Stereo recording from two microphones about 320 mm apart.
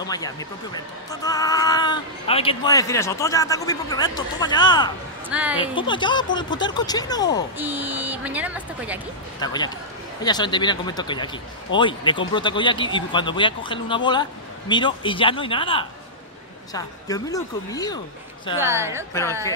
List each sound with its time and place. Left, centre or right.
0.0 s speech: centre
5.3 s speech: centre
5.6 s speech: centre
7.5 s speech: centre
9.4 s speech: centre
18.6 s a woman's voice: centre